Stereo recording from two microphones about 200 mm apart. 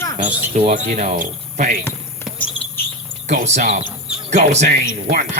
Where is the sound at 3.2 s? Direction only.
35° right (ahead or behind).